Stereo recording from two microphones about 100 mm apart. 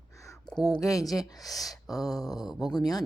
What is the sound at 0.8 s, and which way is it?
Speech, 35° left (ahead or behind).